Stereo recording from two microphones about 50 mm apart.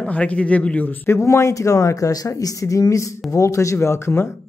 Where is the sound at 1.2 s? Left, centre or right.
Left.